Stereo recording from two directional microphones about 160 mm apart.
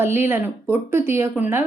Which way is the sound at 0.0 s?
15° right (ahead or behind).